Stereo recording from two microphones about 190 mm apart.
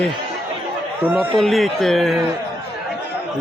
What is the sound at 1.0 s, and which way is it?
Speech, 10° right (ahead or behind).